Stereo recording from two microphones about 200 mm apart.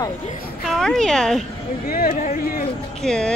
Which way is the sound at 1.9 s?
50° left (ahead or behind).